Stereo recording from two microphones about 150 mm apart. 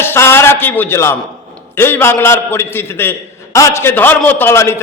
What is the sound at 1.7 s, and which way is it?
A man's voice, 15° left (ahead or behind).